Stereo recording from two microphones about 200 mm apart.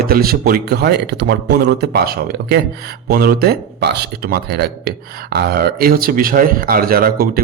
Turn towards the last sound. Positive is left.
turn(degrees=-45)  # may be behind; listen again after turning